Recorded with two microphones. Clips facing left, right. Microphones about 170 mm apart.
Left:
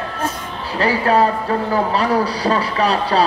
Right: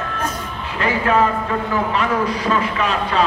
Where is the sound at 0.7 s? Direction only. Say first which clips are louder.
Left 2 dB; 35° left (ahead or behind).